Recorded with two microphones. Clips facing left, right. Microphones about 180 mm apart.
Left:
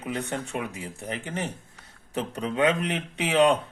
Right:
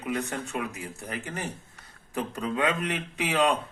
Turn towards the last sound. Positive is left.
turn(degrees=30)  # may be behind; listen again after turning